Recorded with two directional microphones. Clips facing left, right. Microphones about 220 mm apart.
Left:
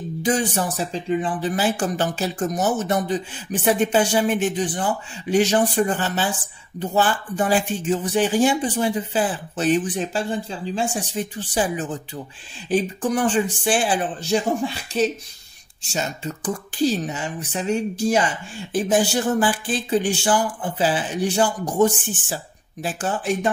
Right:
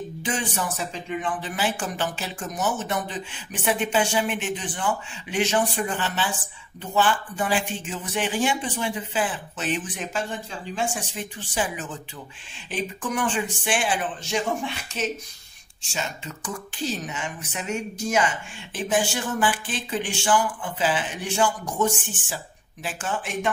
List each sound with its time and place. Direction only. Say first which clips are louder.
0.2 s speech: left 8 dB; 40° left (ahead or behind)